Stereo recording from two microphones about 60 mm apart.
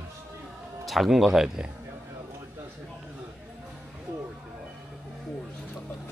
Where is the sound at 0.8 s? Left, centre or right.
Centre.